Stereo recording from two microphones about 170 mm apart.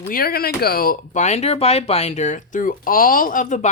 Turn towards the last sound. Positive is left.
turn(degrees=50)  # may be behind; listen again after turning